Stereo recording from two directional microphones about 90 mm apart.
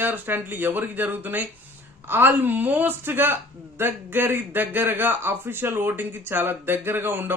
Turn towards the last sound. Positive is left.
turn(degrees=-25)  # may be behind; listen again after turning